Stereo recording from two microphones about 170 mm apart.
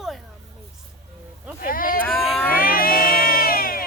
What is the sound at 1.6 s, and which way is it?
Speech, 55° left (ahead or behind).